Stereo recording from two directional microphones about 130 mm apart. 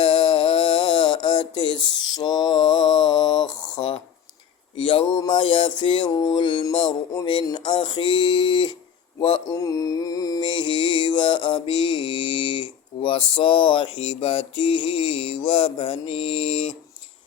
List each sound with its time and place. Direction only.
0.0 s mantra: 40° left (ahead or behind)
6.7 s a sound: 30° left (ahead or behind)
7.4 s mantra: 35° left (ahead or behind)
9.6 s mantra: 25° left (ahead or behind); by 16.7 s 45° left (ahead or behind)